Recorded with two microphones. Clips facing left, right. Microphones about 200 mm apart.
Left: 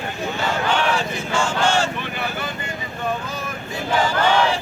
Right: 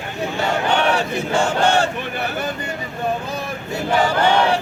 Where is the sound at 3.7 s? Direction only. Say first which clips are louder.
Right 3 dB; 70° right (ahead or behind).